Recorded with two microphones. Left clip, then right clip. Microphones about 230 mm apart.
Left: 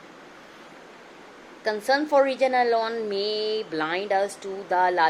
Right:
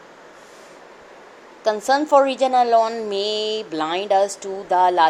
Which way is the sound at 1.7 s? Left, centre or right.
Centre.